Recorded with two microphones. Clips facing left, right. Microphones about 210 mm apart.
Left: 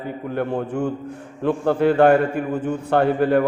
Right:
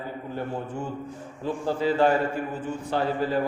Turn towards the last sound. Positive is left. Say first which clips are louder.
# left 8 dB
turn(degrees=60)  # may be behind; listen again after turning